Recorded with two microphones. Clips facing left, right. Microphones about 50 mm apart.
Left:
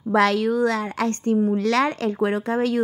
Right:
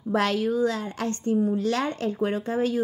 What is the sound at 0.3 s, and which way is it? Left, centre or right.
A woman's voice, left.